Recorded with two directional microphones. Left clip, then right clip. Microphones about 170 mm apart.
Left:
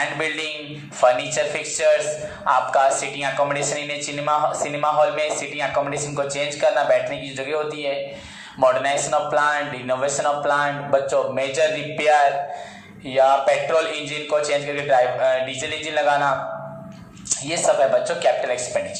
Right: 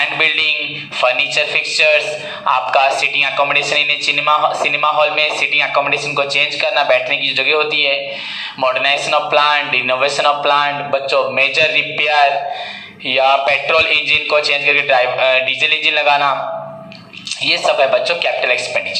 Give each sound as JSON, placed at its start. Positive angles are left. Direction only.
{"t": 0.0, "sound": "a man's voice", "side_deg": -20}
{"t": 17.5, "sound": "a man's voice", "side_deg": -20}